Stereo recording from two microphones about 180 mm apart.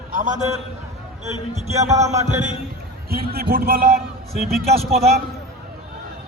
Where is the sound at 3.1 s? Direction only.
60° right (ahead or behind).